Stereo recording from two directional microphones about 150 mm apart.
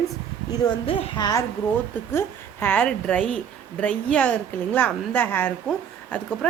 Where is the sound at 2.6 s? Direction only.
10° left (ahead or behind).